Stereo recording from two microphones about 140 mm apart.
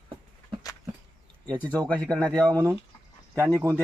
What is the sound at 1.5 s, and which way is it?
Speech, 10° left (ahead or behind).